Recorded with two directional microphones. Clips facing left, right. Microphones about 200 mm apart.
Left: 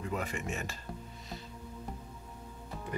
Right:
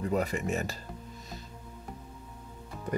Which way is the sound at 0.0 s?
35° right (ahead or behind).